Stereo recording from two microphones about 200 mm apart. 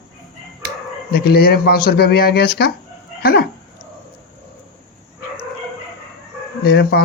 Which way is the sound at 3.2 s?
50° left (ahead or behind).